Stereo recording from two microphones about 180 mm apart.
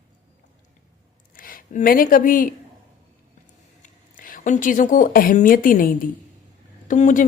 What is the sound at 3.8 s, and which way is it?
Speech, 50° left (ahead or behind).